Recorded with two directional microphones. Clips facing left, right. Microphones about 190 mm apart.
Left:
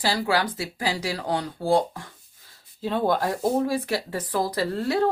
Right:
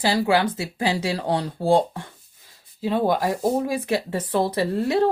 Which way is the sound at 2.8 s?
10° right (ahead or behind).